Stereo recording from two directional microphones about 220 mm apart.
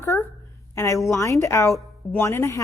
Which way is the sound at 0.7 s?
15° left (ahead or behind).